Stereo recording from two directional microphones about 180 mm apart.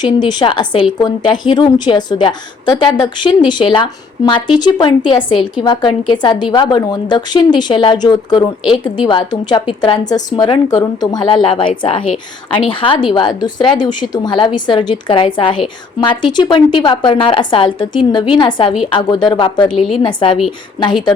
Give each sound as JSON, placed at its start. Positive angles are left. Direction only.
{"t": 0.0, "sound": "a woman's voice", "side_deg": 25}
{"t": 19.6, "sound": "a woman's voice", "side_deg": 0}
{"t": 20.0, "sound": "a woman's voice", "side_deg": 25}